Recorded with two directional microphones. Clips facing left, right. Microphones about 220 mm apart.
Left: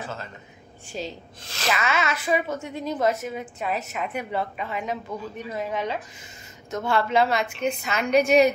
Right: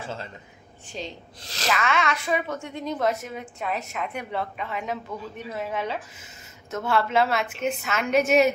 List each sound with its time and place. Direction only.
0.0 s speech: 25° right (ahead or behind)
0.8 s a woman's voice: 5° left (ahead or behind)